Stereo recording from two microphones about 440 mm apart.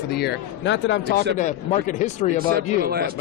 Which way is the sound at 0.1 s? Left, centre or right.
Left.